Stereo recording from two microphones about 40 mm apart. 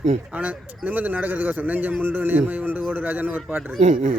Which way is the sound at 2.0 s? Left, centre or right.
Right.